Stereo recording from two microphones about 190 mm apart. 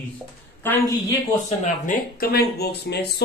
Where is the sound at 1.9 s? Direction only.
55° left (ahead or behind).